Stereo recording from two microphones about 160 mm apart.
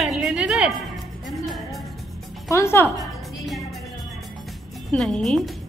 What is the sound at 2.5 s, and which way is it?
Speech, 15° left (ahead or behind).